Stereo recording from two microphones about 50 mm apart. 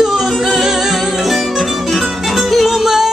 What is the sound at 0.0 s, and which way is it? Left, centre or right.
Music, centre.